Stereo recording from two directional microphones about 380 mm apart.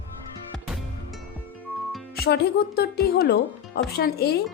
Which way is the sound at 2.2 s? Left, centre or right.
Left.